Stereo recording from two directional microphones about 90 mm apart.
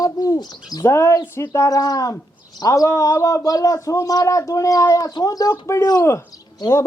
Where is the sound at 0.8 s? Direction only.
30° left (ahead or behind).